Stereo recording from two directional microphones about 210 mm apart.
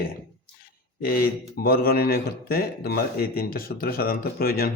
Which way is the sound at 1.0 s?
45° left (ahead or behind).